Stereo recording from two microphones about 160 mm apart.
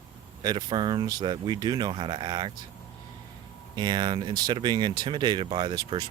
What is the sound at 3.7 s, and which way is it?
Speech, 25° right (ahead or behind).